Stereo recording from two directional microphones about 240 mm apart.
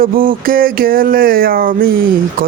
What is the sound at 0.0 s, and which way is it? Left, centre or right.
Speech, right.